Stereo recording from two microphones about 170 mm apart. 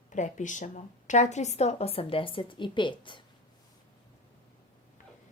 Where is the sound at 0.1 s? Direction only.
45° left (ahead or behind); by 3.2 s 30° left (ahead or behind).